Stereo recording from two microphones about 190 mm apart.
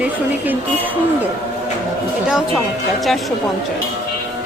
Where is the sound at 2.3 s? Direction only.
Centre (ahead or behind).